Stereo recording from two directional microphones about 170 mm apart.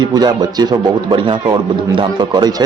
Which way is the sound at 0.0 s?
25° right (ahead or behind).